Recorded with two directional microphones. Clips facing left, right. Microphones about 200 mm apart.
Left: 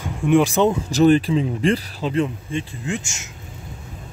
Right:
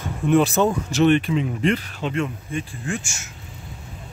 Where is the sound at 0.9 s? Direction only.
35° left (ahead or behind); by 3.3 s 20° left (ahead or behind).